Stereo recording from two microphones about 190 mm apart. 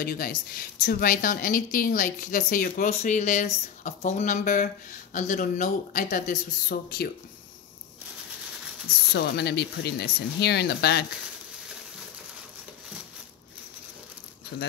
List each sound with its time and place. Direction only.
0.0 s a woman's voice: 50° left (ahead or behind)
9.1 s speech: 60° left (ahead or behind)
14.5 s speech: 55° left (ahead or behind)